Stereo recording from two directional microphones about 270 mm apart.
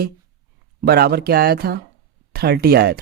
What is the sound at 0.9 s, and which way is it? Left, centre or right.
Speech, right.